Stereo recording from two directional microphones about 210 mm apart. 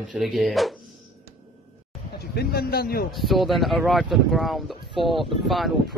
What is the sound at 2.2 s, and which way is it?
Speech, 50° left (ahead or behind).